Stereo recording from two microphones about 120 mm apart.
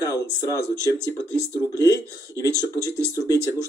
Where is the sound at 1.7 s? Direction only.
30° left (ahead or behind).